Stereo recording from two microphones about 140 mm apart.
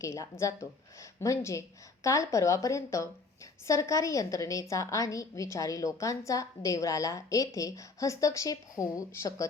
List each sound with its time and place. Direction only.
0.0 s a woman's voice: 20° left (ahead or behind)